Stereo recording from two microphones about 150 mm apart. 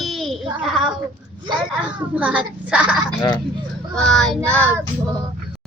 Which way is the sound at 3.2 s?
30° left (ahead or behind).